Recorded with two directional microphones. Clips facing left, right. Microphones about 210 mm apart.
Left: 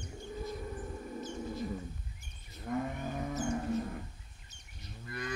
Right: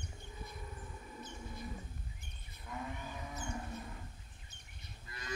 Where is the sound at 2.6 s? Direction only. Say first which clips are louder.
Left 9 dB; 50° left (ahead or behind).